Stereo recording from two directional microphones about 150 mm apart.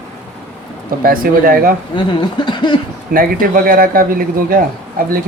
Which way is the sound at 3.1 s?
70° right (ahead or behind).